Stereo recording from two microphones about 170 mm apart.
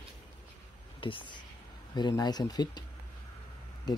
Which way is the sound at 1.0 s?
30° left (ahead or behind).